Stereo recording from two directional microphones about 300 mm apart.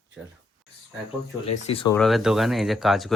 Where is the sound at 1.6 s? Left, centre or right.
Centre.